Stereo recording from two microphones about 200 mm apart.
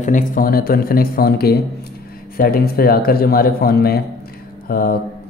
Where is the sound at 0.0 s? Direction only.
40° left (ahead or behind).